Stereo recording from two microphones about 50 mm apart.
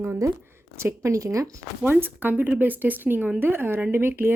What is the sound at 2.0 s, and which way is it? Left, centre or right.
Speech, right.